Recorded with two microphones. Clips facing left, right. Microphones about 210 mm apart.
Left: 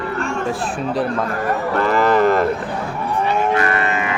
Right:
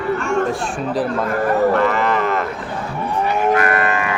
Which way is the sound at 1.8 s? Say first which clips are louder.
Left 3 dB; 35° left (ahead or behind).